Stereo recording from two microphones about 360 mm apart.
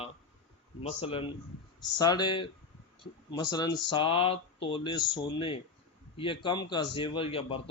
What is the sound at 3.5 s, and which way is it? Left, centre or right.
Speech, centre.